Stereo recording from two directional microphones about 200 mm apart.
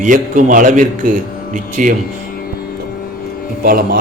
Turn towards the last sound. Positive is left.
turn(degrees=-45)  # may be behind; listen again after turning